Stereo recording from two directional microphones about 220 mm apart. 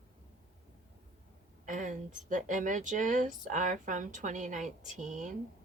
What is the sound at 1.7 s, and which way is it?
Speech, 35° right (ahead or behind).